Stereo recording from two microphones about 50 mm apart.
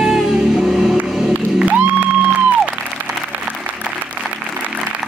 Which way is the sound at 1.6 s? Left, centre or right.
Right.